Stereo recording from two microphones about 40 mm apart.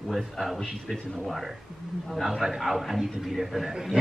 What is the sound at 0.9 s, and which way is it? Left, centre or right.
Speech, centre.